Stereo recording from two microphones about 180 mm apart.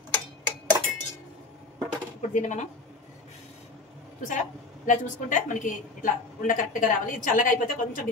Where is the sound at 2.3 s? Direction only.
45° left (ahead or behind).